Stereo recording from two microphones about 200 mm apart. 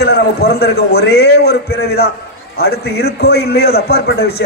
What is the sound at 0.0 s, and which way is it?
A man's voice, 50° left (ahead or behind).